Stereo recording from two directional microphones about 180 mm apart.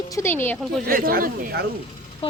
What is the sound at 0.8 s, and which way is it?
Speech, 55° right (ahead or behind).